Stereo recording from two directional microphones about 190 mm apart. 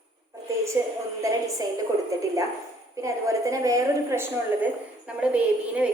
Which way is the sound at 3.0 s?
15° right (ahead or behind).